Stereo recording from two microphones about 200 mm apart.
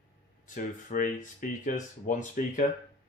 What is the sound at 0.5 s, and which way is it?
Speech, 40° left (ahead or behind).